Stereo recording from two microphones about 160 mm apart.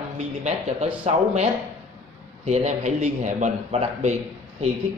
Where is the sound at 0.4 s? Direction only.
45° right (ahead or behind).